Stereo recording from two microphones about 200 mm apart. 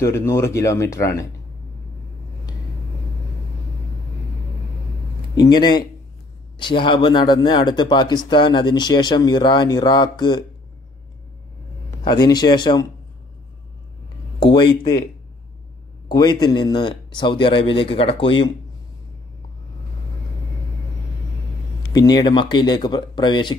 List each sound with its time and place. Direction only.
0.0 s speech: 15° left (ahead or behind)
5.4 s speech: 20° left (ahead or behind)
12.0 s speech: 20° left (ahead or behind)
14.4 s speech: 20° left (ahead or behind)
16.1 s speech: 20° left (ahead or behind)
21.9 s speech: 20° left (ahead or behind)